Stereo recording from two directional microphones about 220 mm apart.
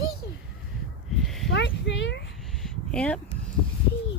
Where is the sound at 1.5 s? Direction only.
55° left (ahead or behind).